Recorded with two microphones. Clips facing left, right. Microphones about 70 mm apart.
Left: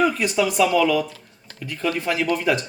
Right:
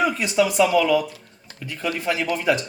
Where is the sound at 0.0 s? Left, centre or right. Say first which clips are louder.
Even; centre.